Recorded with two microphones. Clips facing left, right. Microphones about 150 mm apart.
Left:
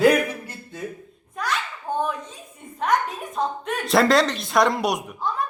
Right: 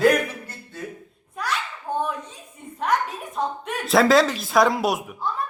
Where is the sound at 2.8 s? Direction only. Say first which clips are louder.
Left 1 dB; 5° right (ahead or behind).